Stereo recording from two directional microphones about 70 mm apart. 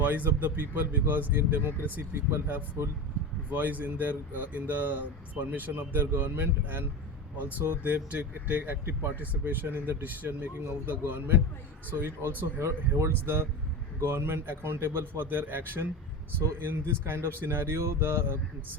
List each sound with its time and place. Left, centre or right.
0.0 s speech: right
7.9 s speech: right